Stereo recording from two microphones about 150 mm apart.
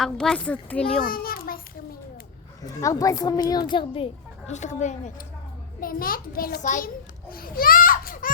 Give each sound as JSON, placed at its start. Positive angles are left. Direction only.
{"t": 0.0, "sound": "a child's voice", "side_deg": 5}
{"t": 1.0, "sound": "a sound", "side_deg": 75}
{"t": 2.6, "sound": "speech", "side_deg": 25}
{"t": 4.5, "sound": "speech", "side_deg": 50}
{"t": 5.8, "sound": "a child's voice", "side_deg": 70}